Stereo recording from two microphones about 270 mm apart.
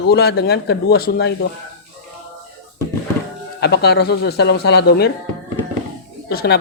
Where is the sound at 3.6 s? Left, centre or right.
Left.